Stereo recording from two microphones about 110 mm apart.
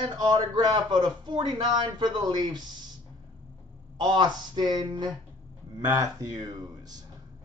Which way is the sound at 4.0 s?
40° right (ahead or behind).